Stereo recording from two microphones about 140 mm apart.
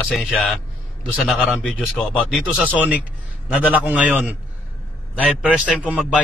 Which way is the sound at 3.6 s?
10° right (ahead or behind).